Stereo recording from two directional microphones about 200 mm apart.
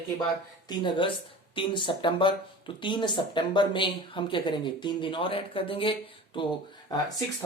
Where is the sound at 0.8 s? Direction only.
25° left (ahead or behind).